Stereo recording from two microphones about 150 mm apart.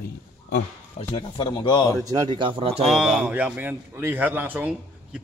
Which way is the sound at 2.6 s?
45° right (ahead or behind).